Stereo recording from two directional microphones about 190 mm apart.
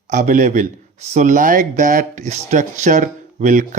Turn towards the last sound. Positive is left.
turn(degrees=-40)  # may be behind; listen again after turning